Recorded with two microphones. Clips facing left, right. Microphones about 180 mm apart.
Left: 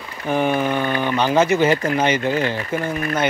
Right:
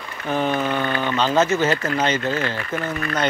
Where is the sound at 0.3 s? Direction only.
10° left (ahead or behind); by 3.2 s 25° left (ahead or behind).